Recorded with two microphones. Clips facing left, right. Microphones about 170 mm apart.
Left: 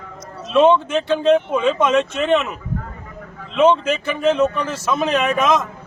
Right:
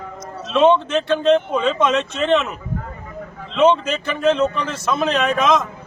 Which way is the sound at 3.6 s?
10° left (ahead or behind).